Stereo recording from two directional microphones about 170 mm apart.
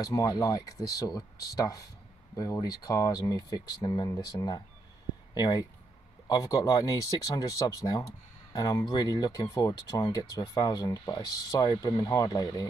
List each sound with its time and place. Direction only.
0.0 s speech: 20° left (ahead or behind)